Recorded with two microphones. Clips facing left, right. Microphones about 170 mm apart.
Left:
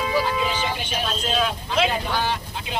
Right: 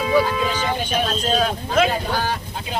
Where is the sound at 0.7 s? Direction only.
40° right (ahead or behind).